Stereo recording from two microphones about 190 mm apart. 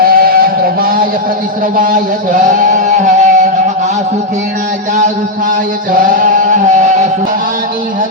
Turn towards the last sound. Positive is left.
turn(degrees=-40)  # may be behind; listen again after turning